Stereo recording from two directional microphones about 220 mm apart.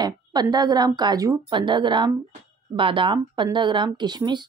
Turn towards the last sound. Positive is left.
turn(degrees=-20)  # may be behind; listen again after turning